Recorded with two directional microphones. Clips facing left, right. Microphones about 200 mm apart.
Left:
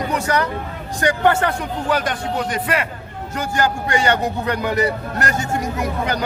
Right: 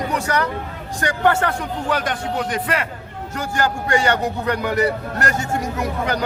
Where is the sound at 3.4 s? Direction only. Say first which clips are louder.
Left 1 dB; 20° left (ahead or behind).